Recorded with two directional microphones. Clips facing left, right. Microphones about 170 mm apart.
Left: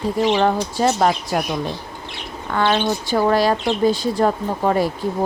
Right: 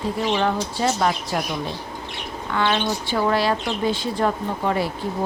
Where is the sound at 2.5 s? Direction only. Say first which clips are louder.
Left 3 dB; 40° left (ahead or behind).